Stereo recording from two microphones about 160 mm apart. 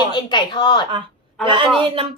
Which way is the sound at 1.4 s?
30° right (ahead or behind).